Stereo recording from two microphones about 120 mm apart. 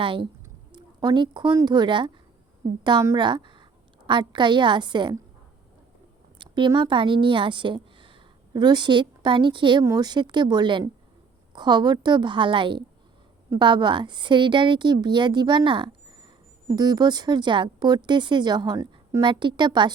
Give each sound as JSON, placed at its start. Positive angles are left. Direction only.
{"t": 0.0, "sound": "speech", "side_deg": -45}
{"t": 3.2, "sound": "a woman's voice", "side_deg": -40}
{"t": 6.4, "sound": "a sound", "side_deg": -40}
{"t": 6.7, "sound": "a woman's voice", "side_deg": -45}
{"t": 19.2, "sound": "speech", "side_deg": -40}